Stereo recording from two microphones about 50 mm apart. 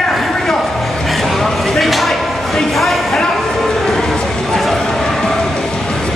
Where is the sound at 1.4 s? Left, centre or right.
Centre.